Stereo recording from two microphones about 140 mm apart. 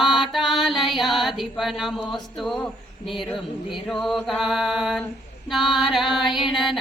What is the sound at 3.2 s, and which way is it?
Music, centre (ahead or behind).